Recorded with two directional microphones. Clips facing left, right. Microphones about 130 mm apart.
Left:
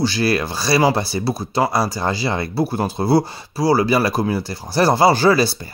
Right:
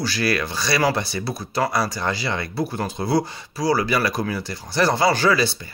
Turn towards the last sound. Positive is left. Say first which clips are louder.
# left 5 dB
turn(degrees=35)  # may be behind; listen again after turning